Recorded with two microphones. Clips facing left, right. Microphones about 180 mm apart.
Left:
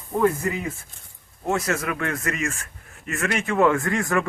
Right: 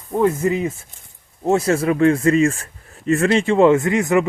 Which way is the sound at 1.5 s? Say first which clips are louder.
Right 8 dB; 30° right (ahead or behind).